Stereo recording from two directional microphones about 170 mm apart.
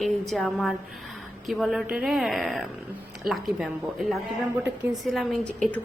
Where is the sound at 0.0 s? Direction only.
Centre (ahead or behind).